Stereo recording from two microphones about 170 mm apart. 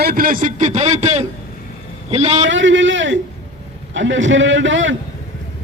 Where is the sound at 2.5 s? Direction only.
90° right.